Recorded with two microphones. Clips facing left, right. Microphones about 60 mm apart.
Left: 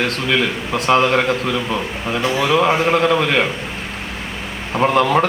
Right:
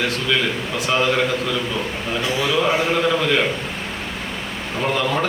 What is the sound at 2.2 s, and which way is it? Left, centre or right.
A man's voice, left.